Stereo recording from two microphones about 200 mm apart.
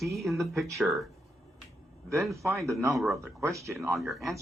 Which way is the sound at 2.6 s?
15° right (ahead or behind).